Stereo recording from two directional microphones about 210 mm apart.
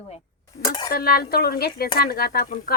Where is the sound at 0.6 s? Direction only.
20° left (ahead or behind).